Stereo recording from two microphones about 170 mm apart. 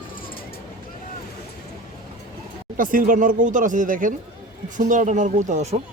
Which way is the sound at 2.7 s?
55° right (ahead or behind).